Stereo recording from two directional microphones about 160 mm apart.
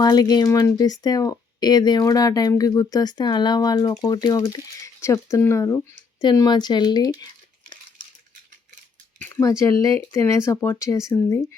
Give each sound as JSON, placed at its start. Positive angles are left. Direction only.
{"t": 0.0, "sound": "speech", "side_deg": 25}
{"t": 9.3, "sound": "speech", "side_deg": 20}